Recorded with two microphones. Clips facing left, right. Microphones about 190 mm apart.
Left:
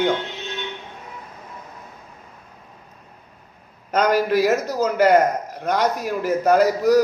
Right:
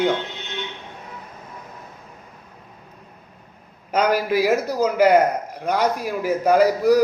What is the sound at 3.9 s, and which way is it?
A man's voice, 10° right (ahead or behind).